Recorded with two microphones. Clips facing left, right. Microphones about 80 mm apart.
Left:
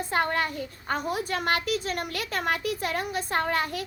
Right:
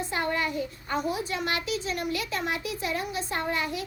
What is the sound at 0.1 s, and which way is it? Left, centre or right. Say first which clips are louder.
A child's voice: left 3 dB; left.